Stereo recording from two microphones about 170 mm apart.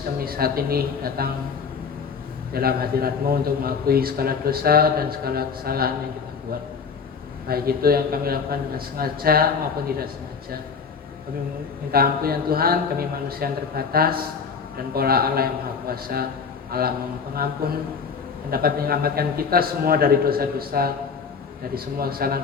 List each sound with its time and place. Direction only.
0.3 s a man's voice: 60° right (ahead or behind)
2.5 s a man's voice: 60° right (ahead or behind)
7.4 s a man's voice: 65° right (ahead or behind)
11.9 s a man's voice: 60° right (ahead or behind)
21.9 s a man's voice: 60° right (ahead or behind)